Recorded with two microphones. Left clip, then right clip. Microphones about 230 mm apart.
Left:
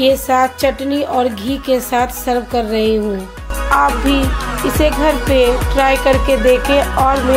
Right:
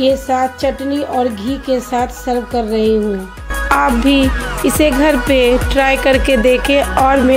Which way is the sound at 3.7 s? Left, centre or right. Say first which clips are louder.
Right 1 dB; right.